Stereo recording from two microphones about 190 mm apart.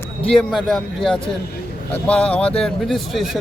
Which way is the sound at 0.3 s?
Centre (ahead or behind).